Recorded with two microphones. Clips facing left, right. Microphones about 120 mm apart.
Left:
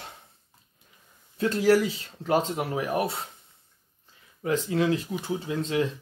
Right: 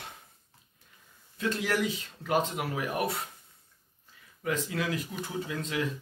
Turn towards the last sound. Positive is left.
turn(degrees=30)  # may be behind; listen again after turning